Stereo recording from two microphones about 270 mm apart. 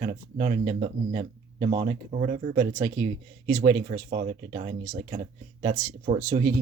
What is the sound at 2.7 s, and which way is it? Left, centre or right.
Speech, centre.